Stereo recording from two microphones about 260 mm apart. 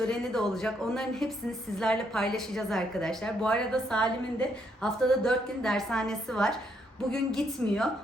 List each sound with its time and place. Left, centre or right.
0.0 s a woman's voice: centre